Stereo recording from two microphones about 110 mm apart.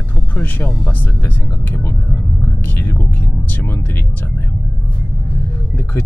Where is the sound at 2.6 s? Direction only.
20° left (ahead or behind).